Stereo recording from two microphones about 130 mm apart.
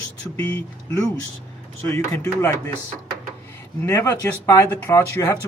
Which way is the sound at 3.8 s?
20° left (ahead or behind).